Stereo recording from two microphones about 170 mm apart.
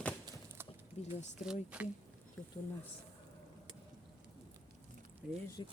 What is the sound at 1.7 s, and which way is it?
Speech, 5° right (ahead or behind).